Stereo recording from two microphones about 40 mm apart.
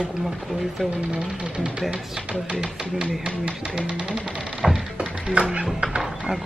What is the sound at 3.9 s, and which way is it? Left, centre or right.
Music, right.